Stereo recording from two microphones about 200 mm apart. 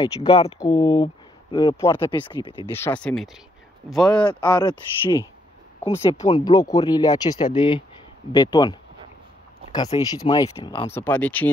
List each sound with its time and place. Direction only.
0.0 s speech: 30° left (ahead or behind)
2.0 s speech: 25° left (ahead or behind)
2.7 s speech: 10° left (ahead or behind)
4.1 s speech: 20° left (ahead or behind)
9.9 s speech: 20° left (ahead or behind)
10.9 s speech: 10° left (ahead or behind)